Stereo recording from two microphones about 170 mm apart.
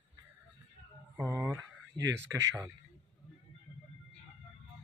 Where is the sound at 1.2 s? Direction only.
15° right (ahead or behind).